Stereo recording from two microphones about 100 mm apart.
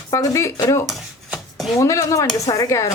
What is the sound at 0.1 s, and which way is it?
Speech, 30° left (ahead or behind).